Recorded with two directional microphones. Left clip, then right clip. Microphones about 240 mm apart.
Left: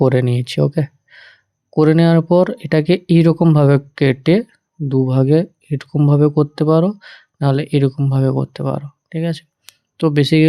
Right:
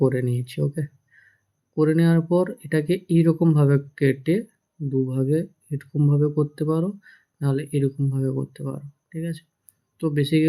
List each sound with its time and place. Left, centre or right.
0.0 s speech: left